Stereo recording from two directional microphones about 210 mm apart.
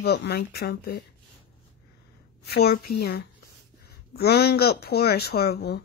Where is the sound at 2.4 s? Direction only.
50° left (ahead or behind).